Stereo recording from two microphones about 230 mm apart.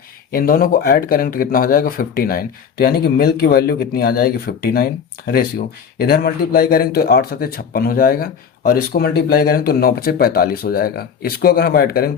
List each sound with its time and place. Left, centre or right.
0.3 s speech: left